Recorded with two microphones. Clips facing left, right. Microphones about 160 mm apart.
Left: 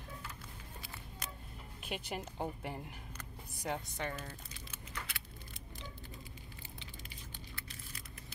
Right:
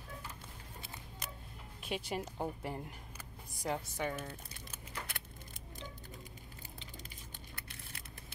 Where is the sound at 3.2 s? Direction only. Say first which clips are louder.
Right 2 dB; 5° right (ahead or behind).